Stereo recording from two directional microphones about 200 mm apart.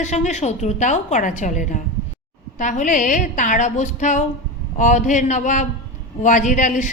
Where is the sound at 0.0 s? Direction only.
35° left (ahead or behind).